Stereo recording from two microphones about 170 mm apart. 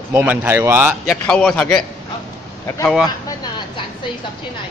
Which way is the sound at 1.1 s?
5° left (ahead or behind).